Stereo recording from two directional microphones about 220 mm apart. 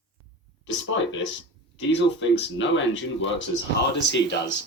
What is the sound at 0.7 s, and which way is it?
Speech, 60° left (ahead or behind).